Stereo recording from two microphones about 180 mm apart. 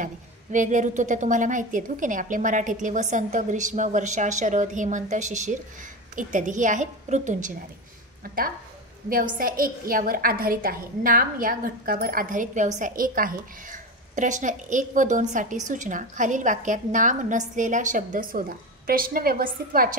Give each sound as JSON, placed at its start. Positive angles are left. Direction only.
{"t": 0.0, "sound": "a woman's voice", "side_deg": -45}
{"t": 9.1, "sound": "a woman's voice", "side_deg": -50}